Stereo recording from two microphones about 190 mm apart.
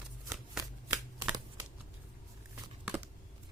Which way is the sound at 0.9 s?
15° right (ahead or behind).